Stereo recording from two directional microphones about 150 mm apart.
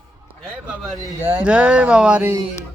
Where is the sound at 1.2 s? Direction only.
10° right (ahead or behind).